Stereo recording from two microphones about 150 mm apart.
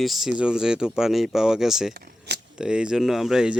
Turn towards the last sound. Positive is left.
turn(degrees=-5)  # may be behind; listen again after turning